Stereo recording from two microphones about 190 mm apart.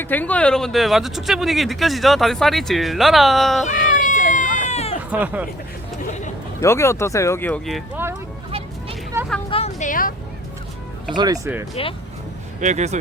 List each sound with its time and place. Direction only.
0.0 s speech: 10° left (ahead or behind)
3.7 s a sound: 40° left (ahead or behind)
5.1 s speech: 10° right (ahead or behind)
6.6 s speech: 15° left (ahead or behind)
9.2 s vehicle: 15° right (ahead or behind)
9.5 s a woman's voice: 35° left (ahead or behind)
11.1 s speech: 20° right (ahead or behind)
11.7 s speech: 30° left (ahead or behind)
12.5 s speech: 40° right (ahead or behind)